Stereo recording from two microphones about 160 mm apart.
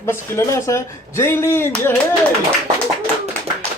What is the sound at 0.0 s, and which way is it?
Speech, 15° left (ahead or behind).